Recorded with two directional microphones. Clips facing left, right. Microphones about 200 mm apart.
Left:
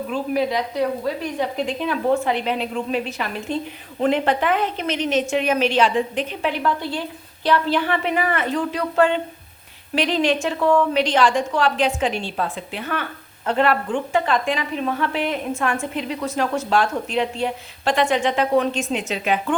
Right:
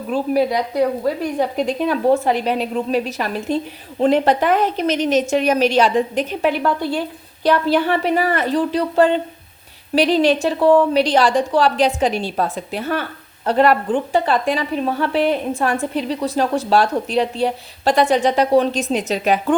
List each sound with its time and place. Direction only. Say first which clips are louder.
0.1 s a woman's voice: right 5 dB; 40° right (ahead or behind)